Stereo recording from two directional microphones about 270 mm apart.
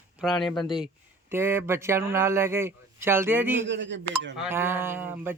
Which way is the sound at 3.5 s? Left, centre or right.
Right.